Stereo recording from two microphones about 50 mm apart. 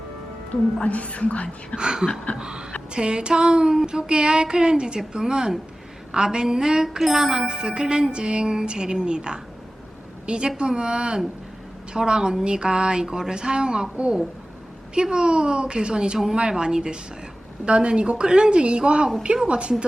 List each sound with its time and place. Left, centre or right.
0.5 s a woman's voice: left
1.7 s music: centre
10.2 s a woman's voice: centre
10.6 s music: centre
13.9 s a woman's voice: right
14.9 s music: centre
17.7 s a woman's voice: right